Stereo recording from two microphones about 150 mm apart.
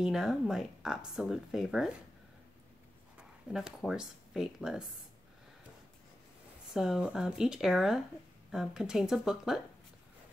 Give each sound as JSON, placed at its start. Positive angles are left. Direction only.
{"t": 0.0, "sound": "speech", "side_deg": -5}
{"t": 3.2, "sound": "speech", "side_deg": -5}
{"t": 6.7, "sound": "speech", "side_deg": -5}